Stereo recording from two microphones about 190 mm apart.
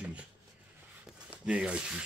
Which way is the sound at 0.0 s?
5° right (ahead or behind).